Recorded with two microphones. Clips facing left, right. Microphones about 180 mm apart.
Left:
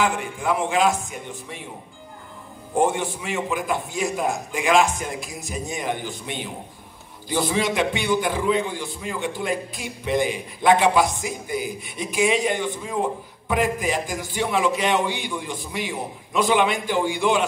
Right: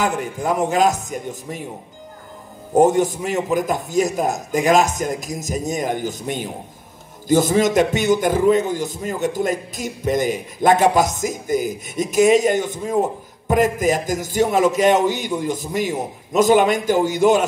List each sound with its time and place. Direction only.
0.0 s a man's voice: 40° right (ahead or behind)
2.7 s a man's voice: 40° right (ahead or behind)